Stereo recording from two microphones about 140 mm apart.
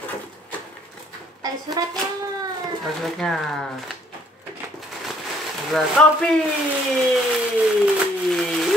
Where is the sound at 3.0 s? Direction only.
Centre (ahead or behind).